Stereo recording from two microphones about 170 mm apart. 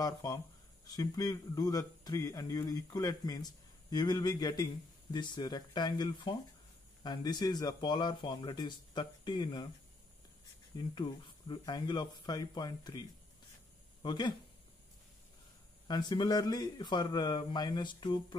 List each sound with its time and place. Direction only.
0.0 s speech: 20° left (ahead or behind)
11.0 s speech: 30° left (ahead or behind)
14.0 s speech: 25° left (ahead or behind)
15.9 s speech: 25° left (ahead or behind)